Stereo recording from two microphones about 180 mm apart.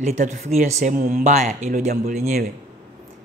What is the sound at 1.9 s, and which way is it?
Speech, 55° right (ahead or behind).